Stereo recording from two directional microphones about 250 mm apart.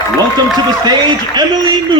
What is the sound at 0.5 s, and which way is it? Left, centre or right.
A man's voice, centre.